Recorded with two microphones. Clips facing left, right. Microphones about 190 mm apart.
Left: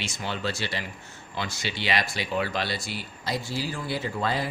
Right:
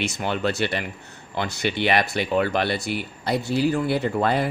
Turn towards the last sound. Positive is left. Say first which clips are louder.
# right 6 dB
turn(degrees=-60)  # may be behind; listen again after turning